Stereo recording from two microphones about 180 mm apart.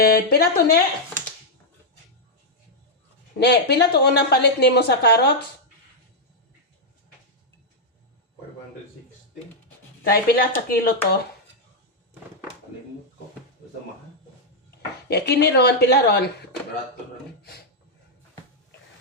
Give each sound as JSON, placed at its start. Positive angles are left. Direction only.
{"t": 0.0, "sound": "a woman's voice", "side_deg": 60}
{"t": 3.3, "sound": "a woman's voice", "side_deg": 65}
{"t": 10.0, "sound": "a woman's voice", "side_deg": 60}
{"t": 15.1, "sound": "a woman's voice", "side_deg": 65}